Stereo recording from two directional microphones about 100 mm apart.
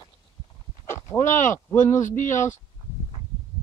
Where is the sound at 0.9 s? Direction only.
25° left (ahead or behind).